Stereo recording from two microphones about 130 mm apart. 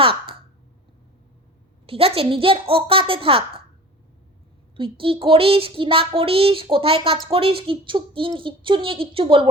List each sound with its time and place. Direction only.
0.0 s a sound: 45° right (ahead or behind)
1.9 s speech: 45° right (ahead or behind)
4.8 s speech: 45° right (ahead or behind)